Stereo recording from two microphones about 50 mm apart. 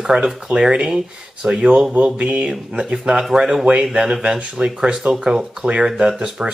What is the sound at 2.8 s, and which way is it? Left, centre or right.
Speech, centre.